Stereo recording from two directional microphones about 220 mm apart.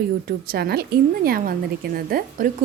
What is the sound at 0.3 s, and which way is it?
A woman's voice, 45° right (ahead or behind).